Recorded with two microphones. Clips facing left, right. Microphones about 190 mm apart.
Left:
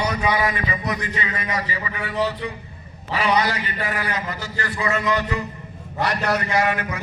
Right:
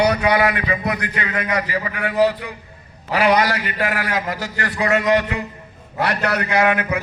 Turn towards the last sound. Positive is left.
turn(degrees=-60)  # may be behind; listen again after turning